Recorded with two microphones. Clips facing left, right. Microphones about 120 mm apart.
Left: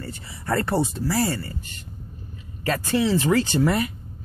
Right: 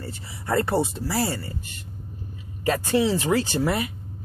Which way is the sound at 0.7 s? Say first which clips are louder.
Left 1 dB; 5° right (ahead or behind).